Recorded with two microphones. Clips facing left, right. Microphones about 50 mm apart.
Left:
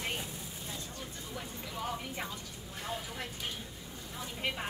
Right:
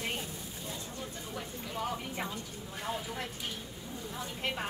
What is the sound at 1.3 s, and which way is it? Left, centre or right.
Speech, centre.